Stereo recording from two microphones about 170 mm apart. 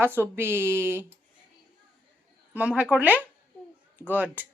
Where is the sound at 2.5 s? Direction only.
10° right (ahead or behind).